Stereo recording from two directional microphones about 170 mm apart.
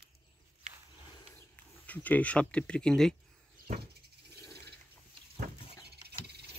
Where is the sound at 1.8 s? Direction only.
10° left (ahead or behind).